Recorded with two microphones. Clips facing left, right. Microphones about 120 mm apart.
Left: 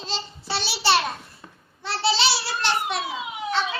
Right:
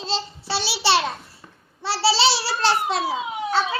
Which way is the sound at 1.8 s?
30° right (ahead or behind).